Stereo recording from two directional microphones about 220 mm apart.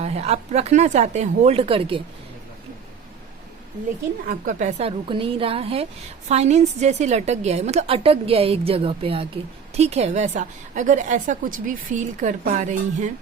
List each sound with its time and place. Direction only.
0.0 s a woman's voice: 30° right (ahead or behind)
4.3 s a woman's voice: 35° right (ahead or behind)